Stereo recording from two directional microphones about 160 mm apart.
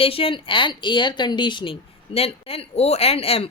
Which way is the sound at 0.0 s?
35° left (ahead or behind).